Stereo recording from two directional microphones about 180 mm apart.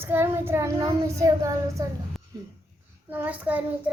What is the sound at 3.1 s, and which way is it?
Child singing, 10° right (ahead or behind).